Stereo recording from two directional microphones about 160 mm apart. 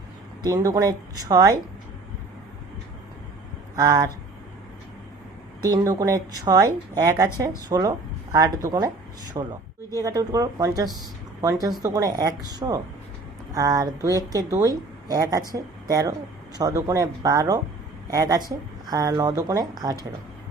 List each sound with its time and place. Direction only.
0.4 s a woman's voice: 20° right (ahead or behind)
3.8 s a woman's voice: 20° right (ahead or behind)
5.6 s a woman's voice: 20° right (ahead or behind)